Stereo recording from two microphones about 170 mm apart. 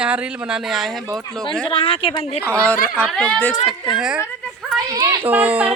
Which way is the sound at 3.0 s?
5° left (ahead or behind).